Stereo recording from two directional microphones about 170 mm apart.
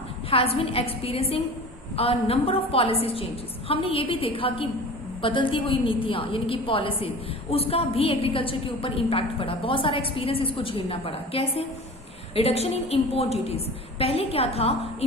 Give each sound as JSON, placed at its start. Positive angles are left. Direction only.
{"t": 0.3, "sound": "a woman's voice", "side_deg": 35}